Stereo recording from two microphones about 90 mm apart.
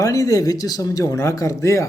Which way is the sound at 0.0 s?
40° left (ahead or behind).